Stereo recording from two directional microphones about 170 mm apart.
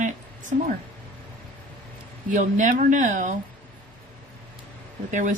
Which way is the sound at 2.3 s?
50° right (ahead or behind).